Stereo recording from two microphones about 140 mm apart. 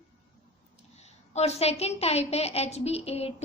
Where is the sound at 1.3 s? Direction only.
50° left (ahead or behind).